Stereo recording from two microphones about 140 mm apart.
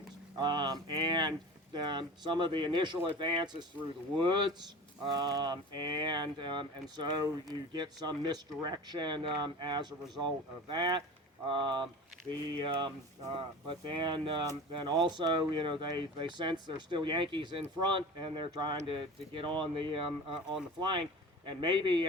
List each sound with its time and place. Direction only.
0.3 s speech: 30° right (ahead or behind)